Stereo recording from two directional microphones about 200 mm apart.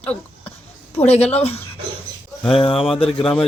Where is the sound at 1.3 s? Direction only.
30° left (ahead or behind).